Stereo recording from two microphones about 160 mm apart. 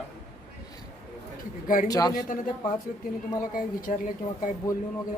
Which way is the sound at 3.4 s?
60° left (ahead or behind).